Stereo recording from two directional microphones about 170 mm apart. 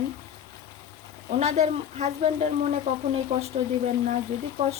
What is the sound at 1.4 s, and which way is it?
Speech, 40° right (ahead or behind).